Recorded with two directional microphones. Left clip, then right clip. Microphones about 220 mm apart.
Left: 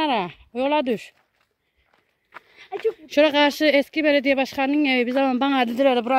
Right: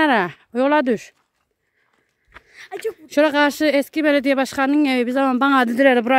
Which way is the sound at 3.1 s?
15° right (ahead or behind).